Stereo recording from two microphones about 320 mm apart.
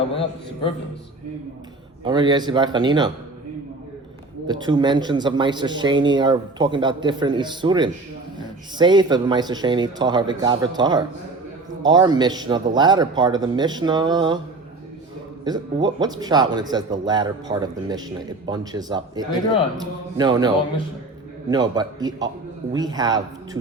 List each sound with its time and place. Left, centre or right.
0.1 s a man's voice: centre
2.0 s speech: centre
4.4 s speech: centre
15.4 s speech: centre
21.5 s speech: centre